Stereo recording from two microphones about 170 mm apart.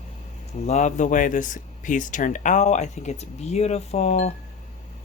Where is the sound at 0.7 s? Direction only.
45° left (ahead or behind).